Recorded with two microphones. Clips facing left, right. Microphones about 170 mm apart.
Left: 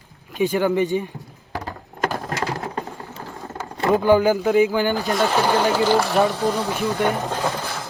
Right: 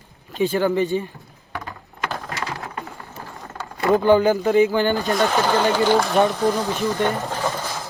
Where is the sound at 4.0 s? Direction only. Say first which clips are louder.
Even; 10° left (ahead or behind).